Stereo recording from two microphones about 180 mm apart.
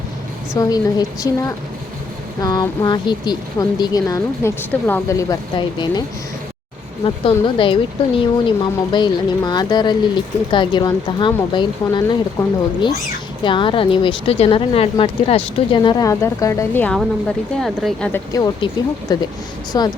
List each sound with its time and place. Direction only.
0.5 s speech: 20° left (ahead or behind)
7.0 s speech: 30° left (ahead or behind); by 18.1 s centre (ahead or behind)
18.1 s speech: 20° left (ahead or behind)